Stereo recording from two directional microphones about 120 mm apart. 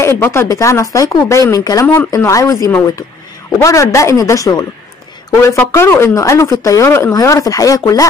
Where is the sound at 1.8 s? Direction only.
15° left (ahead or behind).